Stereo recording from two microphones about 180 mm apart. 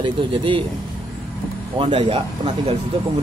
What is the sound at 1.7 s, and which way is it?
Speech, 30° right (ahead or behind).